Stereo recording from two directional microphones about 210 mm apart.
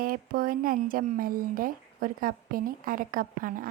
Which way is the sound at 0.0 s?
45° right (ahead or behind).